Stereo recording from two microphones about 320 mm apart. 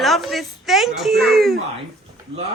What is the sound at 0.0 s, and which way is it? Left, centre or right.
Speech, centre.